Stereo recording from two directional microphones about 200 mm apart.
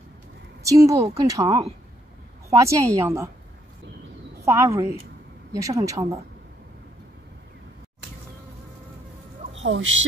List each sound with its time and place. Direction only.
0.7 s speech: 15° right (ahead or behind)
4.5 s speech: 15° right (ahead or behind)
9.6 s speech: 75° right (ahead or behind)